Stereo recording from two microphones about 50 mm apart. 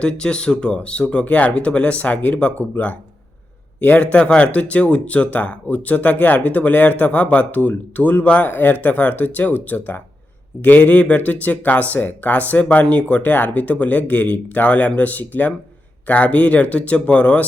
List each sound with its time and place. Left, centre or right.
0.0 s speech: centre